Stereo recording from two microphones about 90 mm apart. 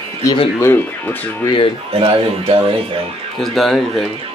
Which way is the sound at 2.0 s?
90° right.